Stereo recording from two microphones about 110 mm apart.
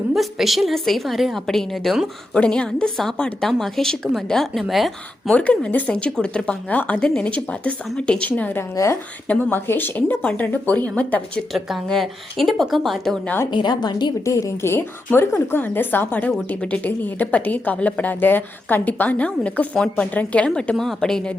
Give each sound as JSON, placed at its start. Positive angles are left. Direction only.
{"t": 0.1, "sound": "a woman's voice", "side_deg": 0}
{"t": 5.3, "sound": "speech", "side_deg": 10}
{"t": 8.7, "sound": "speech", "side_deg": 30}
{"t": 9.2, "sound": "speech", "side_deg": 15}
{"t": 11.5, "sound": "a woman's voice", "side_deg": 0}
{"t": 13.2, "sound": "speech", "side_deg": 20}
{"t": 13.5, "sound": "a woman's voice", "side_deg": 45}
{"t": 14.3, "sound": "speech", "side_deg": 30}